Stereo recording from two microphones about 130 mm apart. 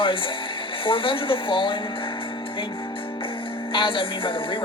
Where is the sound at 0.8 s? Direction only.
40° left (ahead or behind).